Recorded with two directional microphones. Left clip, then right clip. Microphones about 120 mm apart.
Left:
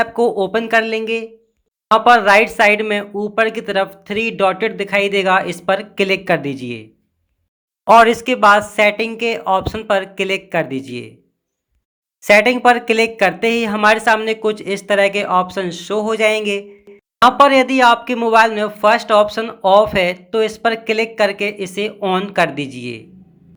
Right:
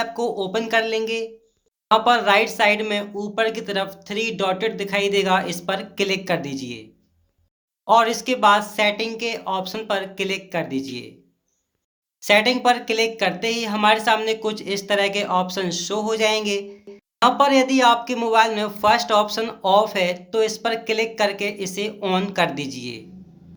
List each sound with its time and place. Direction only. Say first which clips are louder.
0.2 s speech: left 8 dB; 40° left (ahead or behind)
7.9 s speech: left 7 dB; 45° left (ahead or behind)
9.5 s speech: left 10 dB; 35° left (ahead or behind)
9.8 s speech: left 7 dB; 50° left (ahead or behind)
12.7 s speech: left 6 dB; 40° left (ahead or behind)
13.4 s speech: left 7 dB; 55° left (ahead or behind)
13.7 s speech: left 3 dB; 40° left (ahead or behind)
16.4 s speech: left 4 dB; 20° left (ahead or behind)
17.2 s speech: left 6 dB; 40° left (ahead or behind)
22.0 s speech: left 4 dB; 20° left (ahead or behind)
22.3 s speech: left 5 dB; 40° left (ahead or behind)